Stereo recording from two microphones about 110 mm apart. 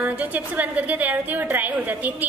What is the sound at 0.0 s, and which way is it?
A woman's voice, 15° right (ahead or behind).